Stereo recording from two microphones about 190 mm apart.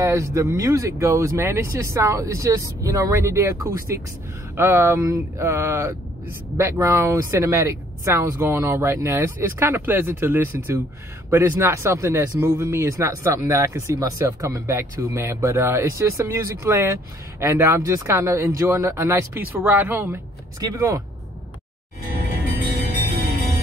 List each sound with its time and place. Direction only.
0.0 s speech: 15° right (ahead or behind)